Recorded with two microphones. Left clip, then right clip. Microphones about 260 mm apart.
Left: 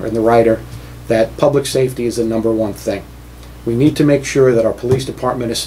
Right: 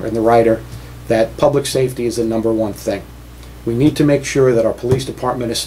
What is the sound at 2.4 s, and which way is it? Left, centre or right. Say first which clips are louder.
Speech: left 1 dB; centre.